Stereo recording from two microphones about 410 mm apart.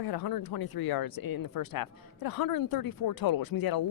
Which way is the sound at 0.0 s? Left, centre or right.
Left.